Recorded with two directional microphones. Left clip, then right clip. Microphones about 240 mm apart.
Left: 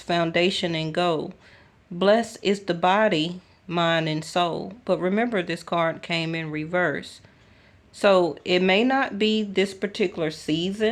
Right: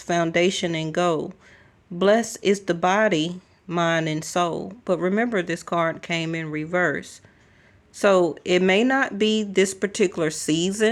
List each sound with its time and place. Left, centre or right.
0.0 s speech: centre